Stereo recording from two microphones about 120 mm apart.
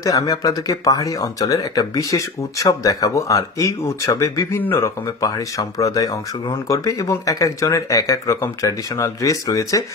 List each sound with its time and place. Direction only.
0.0 s speech: 30° left (ahead or behind)